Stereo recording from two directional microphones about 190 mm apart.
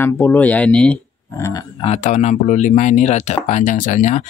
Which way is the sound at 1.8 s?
35° left (ahead or behind).